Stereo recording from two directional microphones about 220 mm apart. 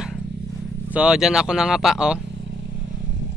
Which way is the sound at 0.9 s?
5° right (ahead or behind).